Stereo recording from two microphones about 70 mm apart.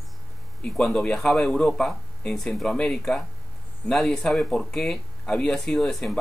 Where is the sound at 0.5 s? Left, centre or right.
Centre.